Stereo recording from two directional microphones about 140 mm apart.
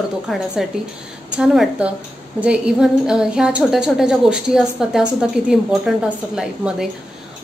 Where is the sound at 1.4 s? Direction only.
5° right (ahead or behind).